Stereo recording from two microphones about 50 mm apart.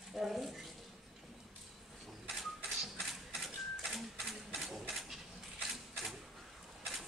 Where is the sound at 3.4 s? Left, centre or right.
Centre.